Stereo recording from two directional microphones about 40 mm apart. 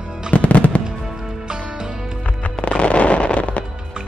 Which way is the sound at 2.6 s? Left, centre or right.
Left.